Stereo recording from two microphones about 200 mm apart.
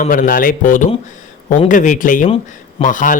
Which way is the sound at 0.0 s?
40° left (ahead or behind).